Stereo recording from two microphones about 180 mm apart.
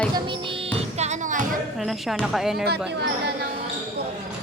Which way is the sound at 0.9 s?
40° right (ahead or behind).